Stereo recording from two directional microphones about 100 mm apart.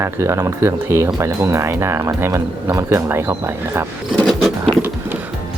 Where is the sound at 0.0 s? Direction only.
30° right (ahead or behind).